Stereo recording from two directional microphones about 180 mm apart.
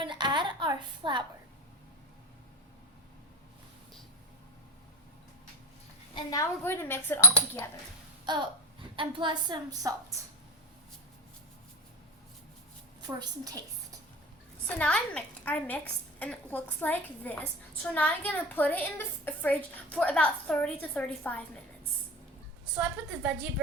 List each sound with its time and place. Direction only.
0.0 s a sound: 25° right (ahead or behind)
6.1 s a woman's voice: 20° left (ahead or behind)
9.0 s a woman's voice: 25° right (ahead or behind)
13.0 s a woman's voice: 20° right (ahead or behind)
14.8 s a woman's voice: 5° left (ahead or behind)
22.8 s a woman's voice: 5° right (ahead or behind)